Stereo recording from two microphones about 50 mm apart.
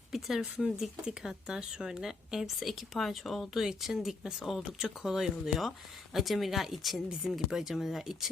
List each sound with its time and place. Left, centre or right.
0.1 s speech: centre
4.2 s speech: centre
4.4 s speech: centre